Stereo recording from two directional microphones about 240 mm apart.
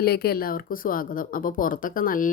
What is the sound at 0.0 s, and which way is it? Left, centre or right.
Speech, left.